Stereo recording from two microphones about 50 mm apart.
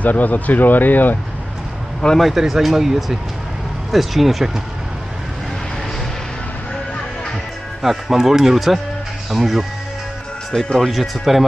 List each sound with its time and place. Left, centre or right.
0.0 s speech: left
2.1 s speech: centre
7.8 s speech: centre
10.5 s speech: centre